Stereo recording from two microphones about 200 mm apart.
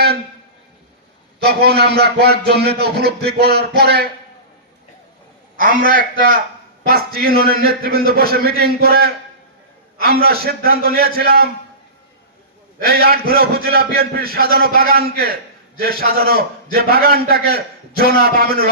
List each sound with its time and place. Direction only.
1.4 s a man's voice: 50° right (ahead or behind)
5.5 s a man's voice: 45° right (ahead or behind)
12.8 s a man's voice: 50° right (ahead or behind)